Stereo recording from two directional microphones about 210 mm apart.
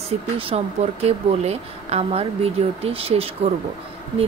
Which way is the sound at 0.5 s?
30° right (ahead or behind).